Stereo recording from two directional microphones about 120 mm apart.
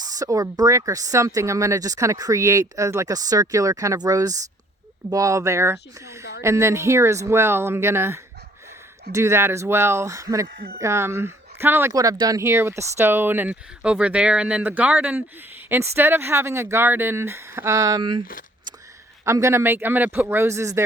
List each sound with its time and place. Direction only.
0.0 s speech: 30° right (ahead or behind)
19.2 s speech: 25° right (ahead or behind)